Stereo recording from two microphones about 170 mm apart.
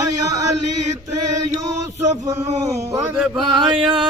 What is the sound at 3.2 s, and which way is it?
Mantra, centre (ahead or behind).